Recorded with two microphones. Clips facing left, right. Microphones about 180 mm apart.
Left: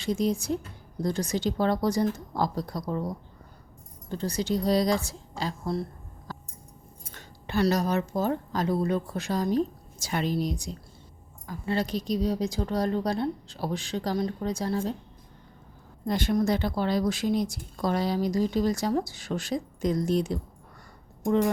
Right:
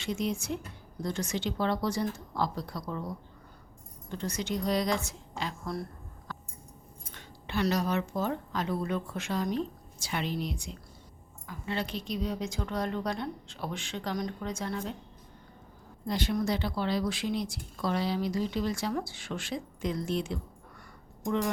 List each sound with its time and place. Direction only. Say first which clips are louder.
0.0 s speech: left 5 dB; 35° left (ahead or behind)
4.1 s speech: left 5 dB; 35° left (ahead or behind)
6.3 s a sound: left 3 dB; 35° left (ahead or behind)
7.1 s speech: left 4 dB; 45° left (ahead or behind)
16.0 s speech: left 5 dB; 50° left (ahead or behind)